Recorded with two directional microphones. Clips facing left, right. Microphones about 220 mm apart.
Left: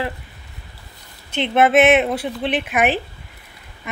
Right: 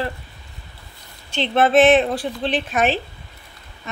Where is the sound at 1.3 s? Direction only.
20° left (ahead or behind).